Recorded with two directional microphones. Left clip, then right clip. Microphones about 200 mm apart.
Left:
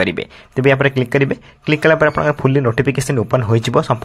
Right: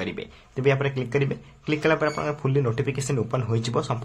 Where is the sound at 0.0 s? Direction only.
35° left (ahead or behind).